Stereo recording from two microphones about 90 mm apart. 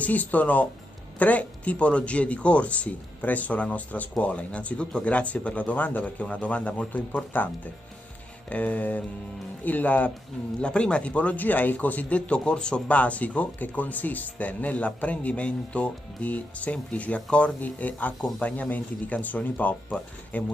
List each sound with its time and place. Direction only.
0.0 s a man's voice: 15° left (ahead or behind)
8.5 s a man's voice: 15° left (ahead or behind)